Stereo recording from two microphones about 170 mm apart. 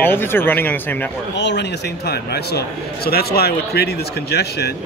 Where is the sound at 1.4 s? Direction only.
90° left; by 4.7 s 70° left (ahead or behind).